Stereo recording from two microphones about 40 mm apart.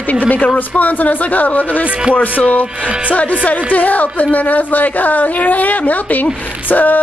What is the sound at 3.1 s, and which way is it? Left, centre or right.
Speech, left.